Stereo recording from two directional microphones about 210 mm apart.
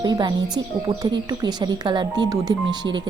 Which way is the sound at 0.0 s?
20° right (ahead or behind).